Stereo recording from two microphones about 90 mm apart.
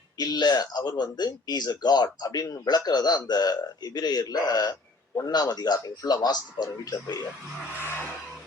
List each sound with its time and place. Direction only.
0.2 s speech: 50° left (ahead or behind)